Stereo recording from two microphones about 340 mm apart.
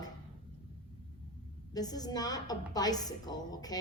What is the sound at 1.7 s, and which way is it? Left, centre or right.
A woman's voice, centre.